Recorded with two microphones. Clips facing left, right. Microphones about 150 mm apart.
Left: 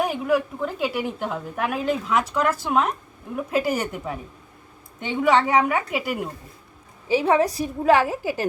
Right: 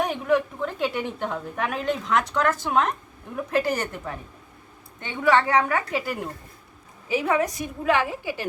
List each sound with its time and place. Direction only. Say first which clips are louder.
0.0 s a woman's voice: left 1 dB; 5° left (ahead or behind)
7.1 s a woman's voice: left 4 dB; 30° left (ahead or behind)